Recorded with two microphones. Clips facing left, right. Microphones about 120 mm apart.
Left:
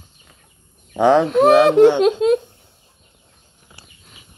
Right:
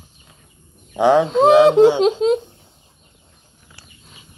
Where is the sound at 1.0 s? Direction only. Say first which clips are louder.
Even; 5° right (ahead or behind).